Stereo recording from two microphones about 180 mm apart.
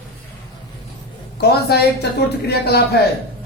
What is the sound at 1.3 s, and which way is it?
A woman's voice, 60° left (ahead or behind).